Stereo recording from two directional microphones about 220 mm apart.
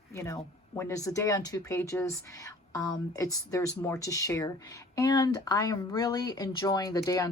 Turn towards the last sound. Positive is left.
turn(degrees=15)  # may be behind; listen again after turning